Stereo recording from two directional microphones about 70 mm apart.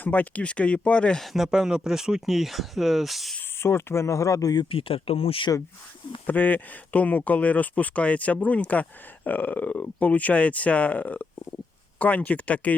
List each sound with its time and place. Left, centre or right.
0.0 s speech: left
1.2 s speech: centre
3.6 s speech: left
6.2 s speech: left